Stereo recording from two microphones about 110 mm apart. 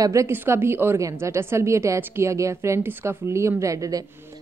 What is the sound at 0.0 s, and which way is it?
A woman's voice, 30° right (ahead or behind).